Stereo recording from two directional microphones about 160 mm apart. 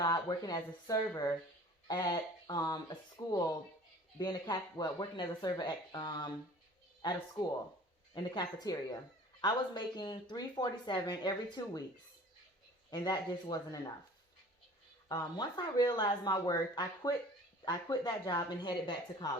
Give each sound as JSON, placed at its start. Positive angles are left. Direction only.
{"t": 0.0, "sound": "speech", "side_deg": 25}
{"t": 12.9, "sound": "speech", "side_deg": 25}
{"t": 15.1, "sound": "speech", "side_deg": 25}